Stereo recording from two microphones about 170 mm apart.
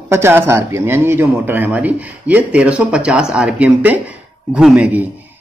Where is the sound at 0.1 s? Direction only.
15° right (ahead or behind).